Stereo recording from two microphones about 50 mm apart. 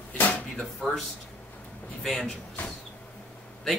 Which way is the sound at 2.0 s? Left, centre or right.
Centre.